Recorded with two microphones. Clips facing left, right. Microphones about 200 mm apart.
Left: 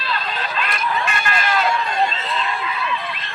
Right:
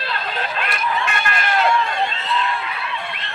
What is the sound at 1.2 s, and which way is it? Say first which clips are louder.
Run: even; 55° right (ahead or behind).